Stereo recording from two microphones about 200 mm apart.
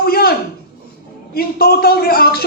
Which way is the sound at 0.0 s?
50° left (ahead or behind).